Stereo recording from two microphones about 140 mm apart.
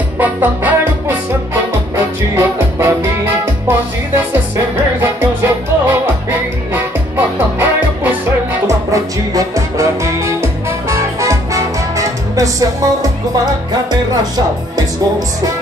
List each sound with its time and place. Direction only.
0.2 s music: 10° right (ahead or behind)